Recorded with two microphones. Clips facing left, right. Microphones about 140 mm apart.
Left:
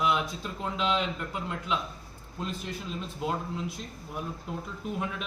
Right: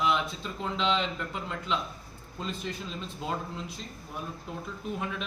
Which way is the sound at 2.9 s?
5° left (ahead or behind).